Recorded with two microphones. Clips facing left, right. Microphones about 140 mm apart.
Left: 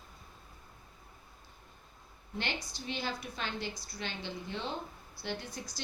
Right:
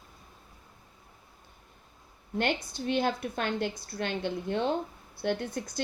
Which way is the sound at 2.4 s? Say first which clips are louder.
Right 9 dB; 55° right (ahead or behind).